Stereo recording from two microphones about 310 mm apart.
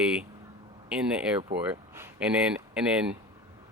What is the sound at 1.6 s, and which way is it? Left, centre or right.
Speech, centre.